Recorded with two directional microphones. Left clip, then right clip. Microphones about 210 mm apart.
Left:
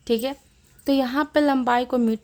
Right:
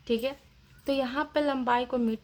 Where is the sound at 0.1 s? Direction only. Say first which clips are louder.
Left 5 dB; 45° left (ahead or behind).